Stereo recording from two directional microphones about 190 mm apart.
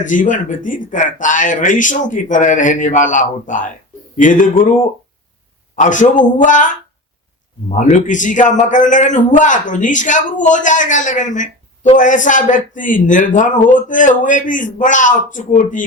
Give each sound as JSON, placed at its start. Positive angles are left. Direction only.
{"t": 0.1, "sound": "speech", "side_deg": 45}
{"t": 5.7, "sound": "a man's voice", "side_deg": 40}
{"t": 7.7, "sound": "a man's voice", "side_deg": 40}